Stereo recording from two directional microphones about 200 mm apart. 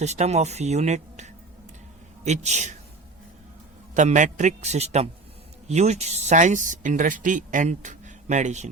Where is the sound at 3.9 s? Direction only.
40° right (ahead or behind).